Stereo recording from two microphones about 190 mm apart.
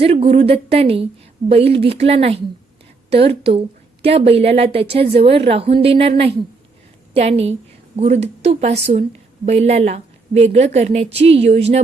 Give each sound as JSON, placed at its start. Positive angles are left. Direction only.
{"t": 0.0, "sound": "a woman's voice", "side_deg": -30}